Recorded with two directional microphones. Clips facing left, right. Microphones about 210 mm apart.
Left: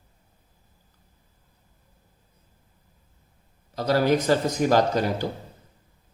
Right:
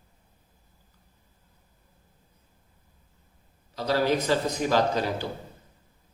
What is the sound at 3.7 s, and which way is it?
Speech, 45° left (ahead or behind).